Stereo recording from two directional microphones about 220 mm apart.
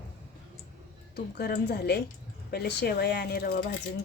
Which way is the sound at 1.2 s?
45° left (ahead or behind).